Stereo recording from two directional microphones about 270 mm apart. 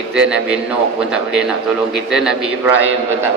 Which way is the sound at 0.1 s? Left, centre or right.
Centre.